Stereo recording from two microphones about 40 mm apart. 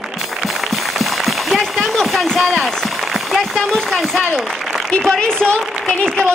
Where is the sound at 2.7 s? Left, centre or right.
Centre.